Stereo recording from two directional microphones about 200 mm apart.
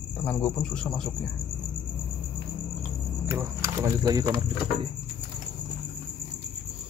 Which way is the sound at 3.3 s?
15° right (ahead or behind).